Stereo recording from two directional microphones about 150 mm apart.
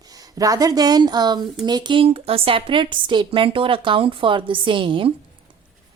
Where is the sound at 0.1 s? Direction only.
25° right (ahead or behind).